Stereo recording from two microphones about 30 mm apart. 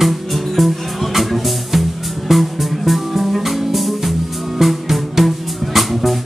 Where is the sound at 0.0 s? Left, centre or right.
Centre.